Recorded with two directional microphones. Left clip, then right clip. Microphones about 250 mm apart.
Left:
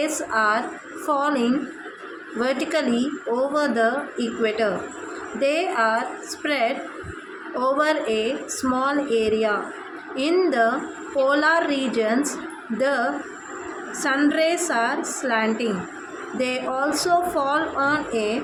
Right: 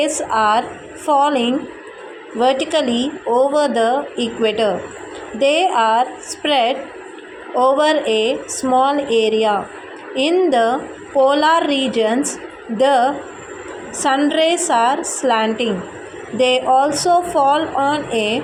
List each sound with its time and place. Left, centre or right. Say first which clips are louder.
0.0 s a woman's voice: right 6 dB; centre